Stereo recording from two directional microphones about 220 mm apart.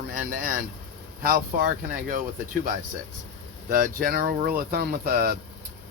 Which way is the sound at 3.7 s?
40° right (ahead or behind).